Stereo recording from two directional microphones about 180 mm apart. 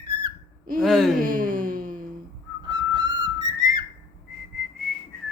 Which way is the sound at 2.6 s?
25° right (ahead or behind).